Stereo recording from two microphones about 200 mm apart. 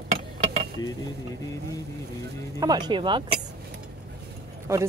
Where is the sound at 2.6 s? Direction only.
20° right (ahead or behind).